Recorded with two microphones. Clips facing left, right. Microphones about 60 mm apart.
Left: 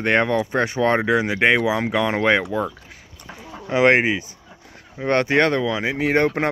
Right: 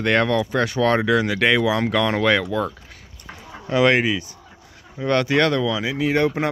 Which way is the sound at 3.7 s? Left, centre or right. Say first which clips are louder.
Left 1 dB; left.